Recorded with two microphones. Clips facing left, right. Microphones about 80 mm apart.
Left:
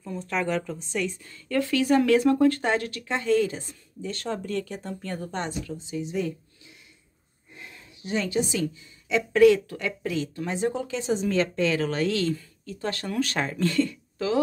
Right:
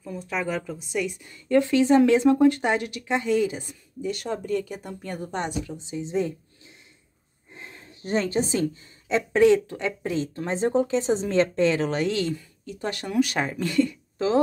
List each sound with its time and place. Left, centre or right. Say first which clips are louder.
0.0 s speech: left 1 dB; centre; by 6.3 s right
7.5 s a sound: right 2 dB; right
9.1 s speech: even; right